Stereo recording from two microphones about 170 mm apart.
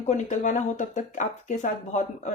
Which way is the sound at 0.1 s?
45° left (ahead or behind).